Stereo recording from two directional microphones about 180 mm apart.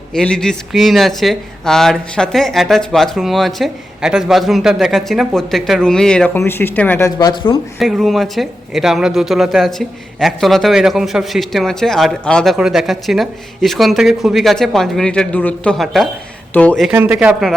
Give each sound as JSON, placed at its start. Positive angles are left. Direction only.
{"t": 0.1, "sound": "speech", "side_deg": 5}
{"t": 7.2, "sound": "speech", "side_deg": 25}
{"t": 7.8, "sound": "speech", "side_deg": 0}
{"t": 16.9, "sound": "speech", "side_deg": -10}